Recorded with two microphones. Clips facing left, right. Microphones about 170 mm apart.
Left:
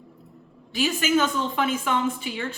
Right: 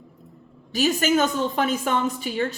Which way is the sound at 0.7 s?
40° right (ahead or behind).